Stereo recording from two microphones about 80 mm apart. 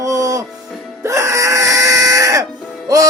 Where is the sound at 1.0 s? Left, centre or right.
Right.